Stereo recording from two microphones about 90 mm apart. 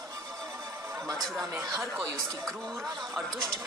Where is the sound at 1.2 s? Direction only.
5° left (ahead or behind).